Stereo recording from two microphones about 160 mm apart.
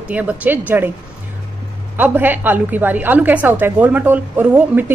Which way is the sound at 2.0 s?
10° right (ahead or behind).